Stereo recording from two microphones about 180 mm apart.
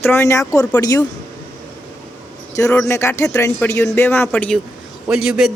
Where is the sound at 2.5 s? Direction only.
15° left (ahead or behind).